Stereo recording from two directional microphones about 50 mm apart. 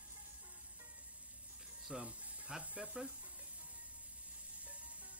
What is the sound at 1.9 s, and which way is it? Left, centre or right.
Music, right.